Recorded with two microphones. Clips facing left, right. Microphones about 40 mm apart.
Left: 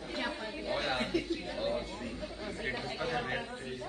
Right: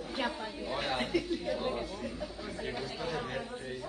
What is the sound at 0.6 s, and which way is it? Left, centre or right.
Speech, left.